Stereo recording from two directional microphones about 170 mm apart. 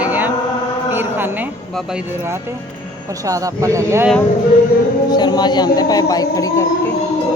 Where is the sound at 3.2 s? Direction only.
20° right (ahead or behind).